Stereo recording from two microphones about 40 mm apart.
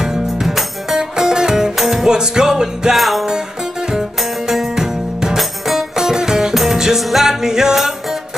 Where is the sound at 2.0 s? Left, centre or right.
Centre.